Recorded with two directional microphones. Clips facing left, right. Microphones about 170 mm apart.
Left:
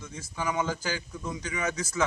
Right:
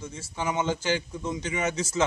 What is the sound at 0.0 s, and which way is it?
A man's voice, 25° right (ahead or behind).